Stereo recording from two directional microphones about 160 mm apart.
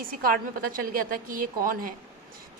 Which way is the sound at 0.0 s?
65° right (ahead or behind).